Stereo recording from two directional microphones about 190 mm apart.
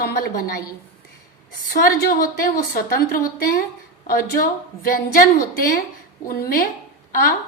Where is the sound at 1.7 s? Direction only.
50° left (ahead or behind).